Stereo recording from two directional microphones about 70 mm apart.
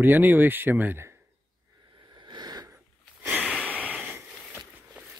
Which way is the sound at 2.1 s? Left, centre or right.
Right.